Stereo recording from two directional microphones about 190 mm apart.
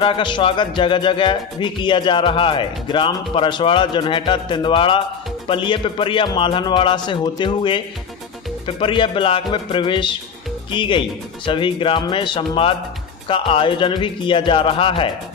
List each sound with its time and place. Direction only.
0.0 s music: 25° left (ahead or behind)